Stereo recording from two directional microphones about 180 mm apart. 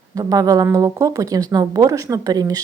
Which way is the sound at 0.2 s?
20° right (ahead or behind).